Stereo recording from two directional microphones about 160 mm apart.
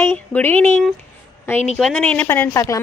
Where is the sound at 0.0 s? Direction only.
15° left (ahead or behind).